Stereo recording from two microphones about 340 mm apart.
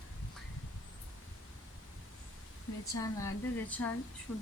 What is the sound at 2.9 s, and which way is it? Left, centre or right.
Speech, centre.